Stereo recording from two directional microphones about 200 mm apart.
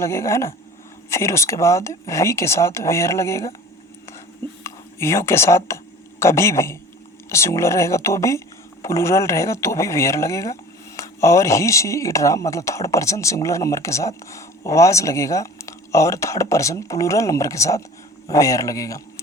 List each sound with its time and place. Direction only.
0.0 s speech: 15° left (ahead or behind)
4.6 s speech: 15° left (ahead or behind)